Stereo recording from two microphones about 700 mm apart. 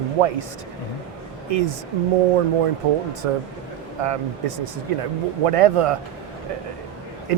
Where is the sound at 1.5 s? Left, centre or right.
Right.